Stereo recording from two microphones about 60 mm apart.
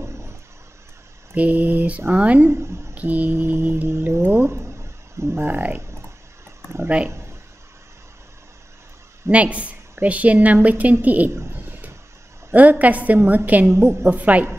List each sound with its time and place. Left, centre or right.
0.0 s a sound: right
1.3 s a woman's voice: right
2.5 s a woman's voice: right
2.9 s mantra: right
4.1 s speech: right
7.1 s a sound: right
9.3 s a woman's voice: right
11.2 s speech: right
11.5 s a sound: right
12.5 s a woman's voice: right
13.7 s a woman's voice: right
14.1 s a woman's voice: right